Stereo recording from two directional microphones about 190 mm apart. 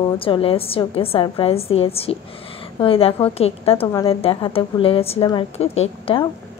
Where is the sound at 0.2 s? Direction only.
30° left (ahead or behind).